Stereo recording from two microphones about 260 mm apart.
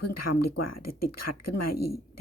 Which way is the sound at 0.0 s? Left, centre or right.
Left.